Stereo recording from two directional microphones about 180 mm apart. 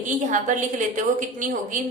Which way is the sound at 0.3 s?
45° right (ahead or behind).